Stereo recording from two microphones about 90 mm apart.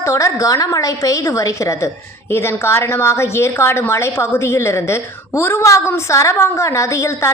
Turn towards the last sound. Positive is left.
turn(degrees=35)  # may be behind; listen again after turning